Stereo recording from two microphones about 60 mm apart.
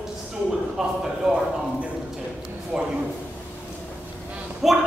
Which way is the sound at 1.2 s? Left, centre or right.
Centre.